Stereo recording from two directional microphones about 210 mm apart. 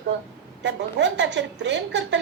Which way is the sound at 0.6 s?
55° right (ahead or behind).